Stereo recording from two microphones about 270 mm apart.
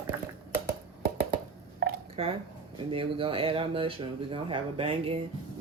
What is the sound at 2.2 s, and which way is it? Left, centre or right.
Speech, right.